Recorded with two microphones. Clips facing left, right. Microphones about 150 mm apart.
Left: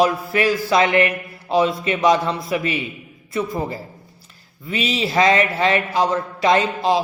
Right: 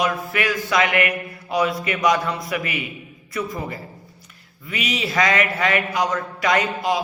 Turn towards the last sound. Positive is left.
turn(degrees=25)  # may be behind; listen again after turning